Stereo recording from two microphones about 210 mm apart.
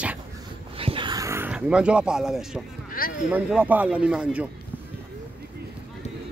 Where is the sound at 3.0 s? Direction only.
45° left (ahead or behind).